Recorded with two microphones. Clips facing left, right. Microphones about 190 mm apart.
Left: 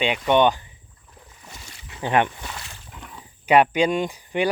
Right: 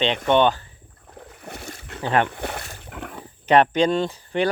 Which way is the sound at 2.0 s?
15° left (ahead or behind).